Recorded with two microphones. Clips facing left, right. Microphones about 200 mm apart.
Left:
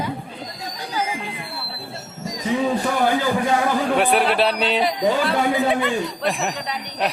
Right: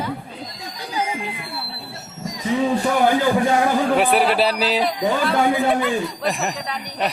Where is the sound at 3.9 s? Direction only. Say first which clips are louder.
Left 1 dB; centre (ahead or behind).